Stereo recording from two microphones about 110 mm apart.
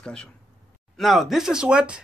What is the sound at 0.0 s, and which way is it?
Speech, 10° left (ahead or behind).